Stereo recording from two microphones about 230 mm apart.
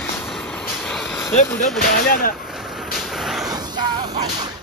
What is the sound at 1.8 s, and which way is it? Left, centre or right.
Speech, left.